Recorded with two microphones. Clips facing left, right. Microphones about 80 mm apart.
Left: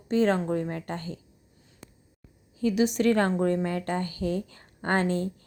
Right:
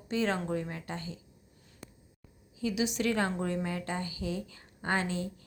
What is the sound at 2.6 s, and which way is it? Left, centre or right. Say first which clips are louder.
Speech: left 7 dB; left.